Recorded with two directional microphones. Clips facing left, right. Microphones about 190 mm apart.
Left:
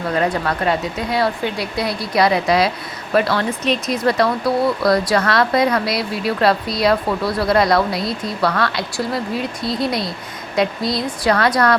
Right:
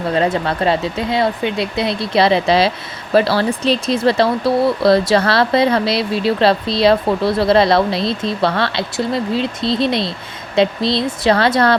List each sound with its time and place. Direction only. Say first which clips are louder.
0.1 s speech: right 2 dB; 25° right (ahead or behind)